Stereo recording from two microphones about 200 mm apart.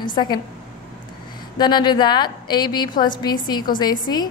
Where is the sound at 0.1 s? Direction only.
20° left (ahead or behind).